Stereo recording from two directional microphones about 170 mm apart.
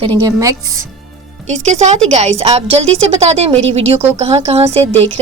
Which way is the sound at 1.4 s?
40° right (ahead or behind).